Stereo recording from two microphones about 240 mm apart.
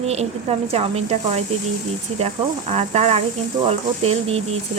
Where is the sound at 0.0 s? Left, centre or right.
Right.